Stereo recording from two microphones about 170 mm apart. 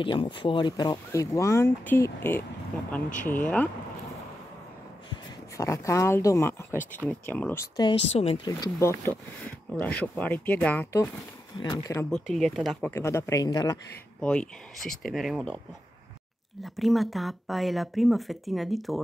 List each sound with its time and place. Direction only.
0.0 s speech: 30° left (ahead or behind); by 3.6 s 10° left (ahead or behind)
5.6 s speech: 20° left (ahead or behind)
8.1 s speech: 35° left (ahead or behind)
8.5 s speech: 20° left (ahead or behind)
12.1 s speech: centre (ahead or behind)
12.9 s speech: 15° left (ahead or behind)
14.2 s speech: 5° left (ahead or behind)
16.6 s speech: centre (ahead or behind)